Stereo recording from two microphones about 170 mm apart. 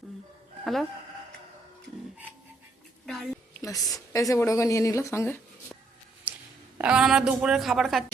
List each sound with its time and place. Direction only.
0.6 s speech: centre (ahead or behind)
3.6 s speech: 20° left (ahead or behind)
6.3 s a sound: 10° right (ahead or behind)
6.7 s a woman's voice: 5° right (ahead or behind)